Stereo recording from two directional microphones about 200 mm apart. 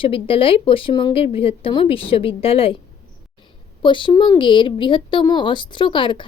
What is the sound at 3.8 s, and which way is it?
Speech, 25° left (ahead or behind).